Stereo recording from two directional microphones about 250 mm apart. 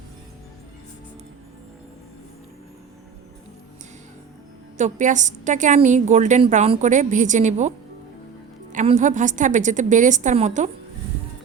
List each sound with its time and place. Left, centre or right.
4.8 s a woman's voice: right
8.7 s a woman's voice: right